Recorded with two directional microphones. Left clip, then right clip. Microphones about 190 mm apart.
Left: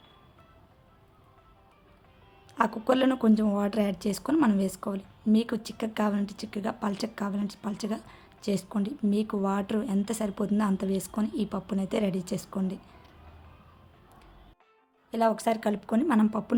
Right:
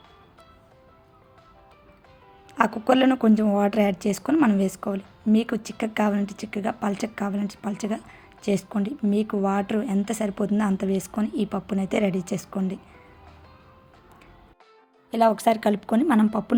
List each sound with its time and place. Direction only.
2.5 s a woman's voice: 15° right (ahead or behind)
15.1 s a woman's voice: 20° right (ahead or behind)